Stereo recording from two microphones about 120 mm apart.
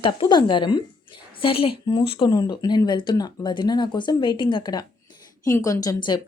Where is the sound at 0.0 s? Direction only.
40° left (ahead or behind).